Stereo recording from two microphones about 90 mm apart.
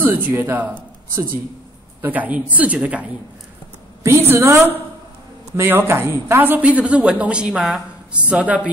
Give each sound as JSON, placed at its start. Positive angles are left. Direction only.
{"t": 0.0, "sound": "speech", "side_deg": -25}
{"t": 2.0, "sound": "speech", "side_deg": -20}
{"t": 4.0, "sound": "a woman's voice", "side_deg": -30}